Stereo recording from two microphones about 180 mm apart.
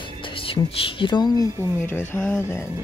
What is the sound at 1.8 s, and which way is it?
Speech, 10° left (ahead or behind).